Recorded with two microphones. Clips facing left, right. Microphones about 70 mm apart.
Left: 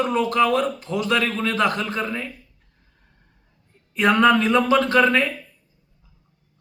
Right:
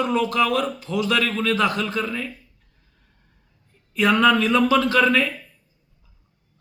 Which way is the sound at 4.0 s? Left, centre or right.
Left.